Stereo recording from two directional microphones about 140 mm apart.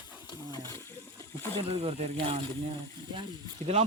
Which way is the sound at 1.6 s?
45° right (ahead or behind).